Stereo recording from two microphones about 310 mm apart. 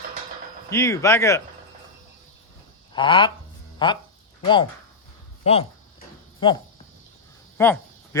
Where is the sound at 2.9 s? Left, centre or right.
Centre.